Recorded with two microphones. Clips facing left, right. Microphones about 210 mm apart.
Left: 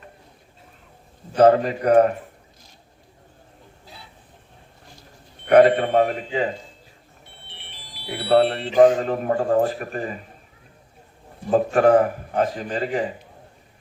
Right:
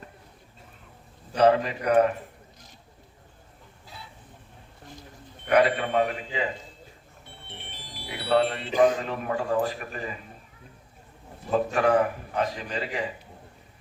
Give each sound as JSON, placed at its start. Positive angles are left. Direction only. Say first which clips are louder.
{"t": 1.4, "sound": "a man's voice", "louder": "left 5 dB", "side_deg": 40}
{"t": 5.5, "sound": "a man's voice", "louder": "left 8 dB", "side_deg": 45}
{"t": 7.4, "sound": "music", "louder": "right 4 dB", "side_deg": -50}
{"t": 8.3, "sound": "a man's voice", "louder": "left 6 dB", "side_deg": 40}
{"t": 11.5, "sound": "a man's voice", "louder": "left 6 dB", "side_deg": 45}